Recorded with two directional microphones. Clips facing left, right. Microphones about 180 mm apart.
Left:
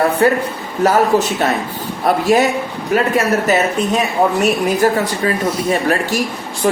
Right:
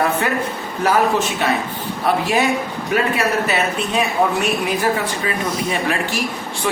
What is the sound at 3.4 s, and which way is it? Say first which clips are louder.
A woman's voice: left 5 dB; 45° left (ahead or behind).